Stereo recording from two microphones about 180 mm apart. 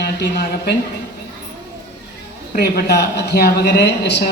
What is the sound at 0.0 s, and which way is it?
Speech, 65° left (ahead or behind).